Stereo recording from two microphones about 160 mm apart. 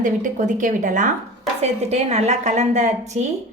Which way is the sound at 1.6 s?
40° right (ahead or behind).